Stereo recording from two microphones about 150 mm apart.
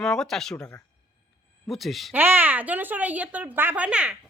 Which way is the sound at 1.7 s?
Centre (ahead or behind).